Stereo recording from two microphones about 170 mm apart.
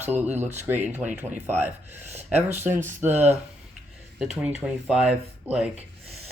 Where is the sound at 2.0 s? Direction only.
40° right (ahead or behind).